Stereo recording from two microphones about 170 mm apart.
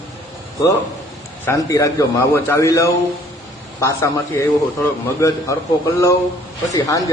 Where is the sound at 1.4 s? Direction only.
15° left (ahead or behind).